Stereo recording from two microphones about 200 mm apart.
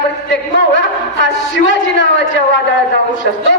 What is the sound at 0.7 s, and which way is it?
A man's voice, 65° left (ahead or behind).